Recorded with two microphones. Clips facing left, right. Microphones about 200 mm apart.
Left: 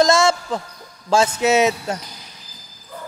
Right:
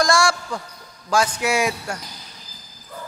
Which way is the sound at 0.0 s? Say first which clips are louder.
Left 4 dB; 20° left (ahead or behind).